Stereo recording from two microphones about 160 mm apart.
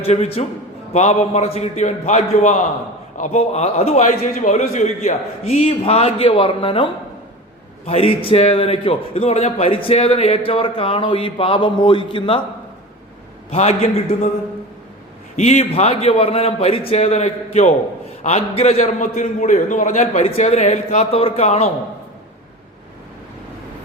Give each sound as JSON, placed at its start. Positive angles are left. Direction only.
{"t": 0.0, "sound": "a man's voice", "side_deg": 40}
{"t": 13.5, "sound": "a man's voice", "side_deg": 40}
{"t": 15.4, "sound": "a man's voice", "side_deg": 45}